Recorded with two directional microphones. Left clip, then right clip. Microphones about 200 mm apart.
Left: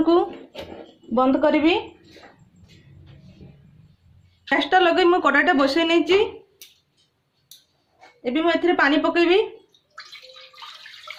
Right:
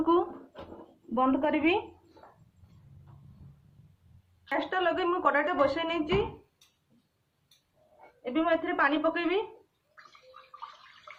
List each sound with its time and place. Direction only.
0.0 s speech: 45° left (ahead or behind)
1.1 s a woman's voice: 25° left (ahead or behind)
4.4 s a woman's voice: 55° left (ahead or behind)
8.2 s a woman's voice: 45° left (ahead or behind)